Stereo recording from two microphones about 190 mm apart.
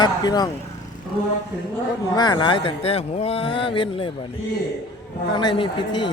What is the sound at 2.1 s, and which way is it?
Speech, 20° left (ahead or behind).